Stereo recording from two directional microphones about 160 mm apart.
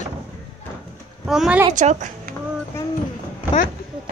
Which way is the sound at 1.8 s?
50° right (ahead or behind).